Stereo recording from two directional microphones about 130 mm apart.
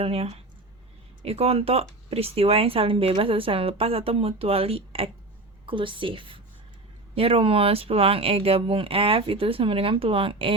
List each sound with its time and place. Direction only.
0.0 s a woman's voice: 50° right (ahead or behind)